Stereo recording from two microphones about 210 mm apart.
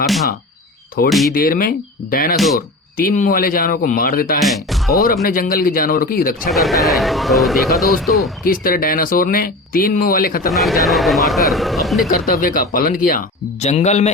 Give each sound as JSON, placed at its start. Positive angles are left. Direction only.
{"t": 1.3, "sound": "speech", "side_deg": 45}
{"t": 2.3, "sound": "speech", "side_deg": 0}
{"t": 2.6, "sound": "speech", "side_deg": 45}
{"t": 4.4, "sound": "speech", "side_deg": 0}
{"t": 5.0, "sound": "speech", "side_deg": 45}
{"t": 6.5, "sound": "speech", "side_deg": 0}
{"t": 8.4, "sound": "speech", "side_deg": 45}
{"t": 10.5, "sound": "speech", "side_deg": 0}
{"t": 12.0, "sound": "speech", "side_deg": 40}